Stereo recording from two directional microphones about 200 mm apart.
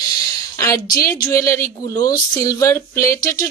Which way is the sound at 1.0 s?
15° left (ahead or behind).